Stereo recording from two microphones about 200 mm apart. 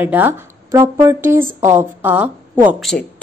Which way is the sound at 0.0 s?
10° right (ahead or behind).